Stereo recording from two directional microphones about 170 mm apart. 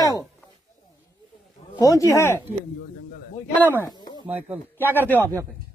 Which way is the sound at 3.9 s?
25° left (ahead or behind).